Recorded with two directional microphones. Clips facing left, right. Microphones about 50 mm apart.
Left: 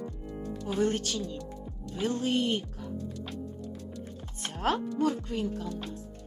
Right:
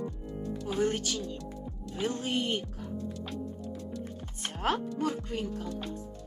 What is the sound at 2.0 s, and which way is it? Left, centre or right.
Speech, centre.